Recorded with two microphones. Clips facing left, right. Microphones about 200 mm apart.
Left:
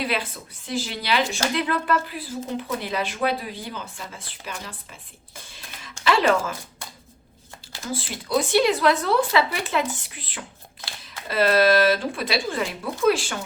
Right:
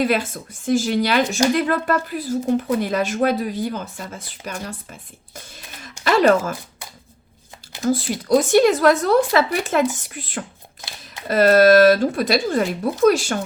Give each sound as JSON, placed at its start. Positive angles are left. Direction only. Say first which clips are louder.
{"t": 0.0, "sound": "a woman's voice", "louder": "right 7 dB", "side_deg": -45}
{"t": 7.9, "sound": "a woman's voice", "louder": "right 10 dB", "side_deg": -45}